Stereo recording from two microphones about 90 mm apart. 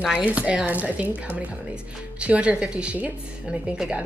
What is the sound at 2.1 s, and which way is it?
A woman's voice, 10° right (ahead or behind).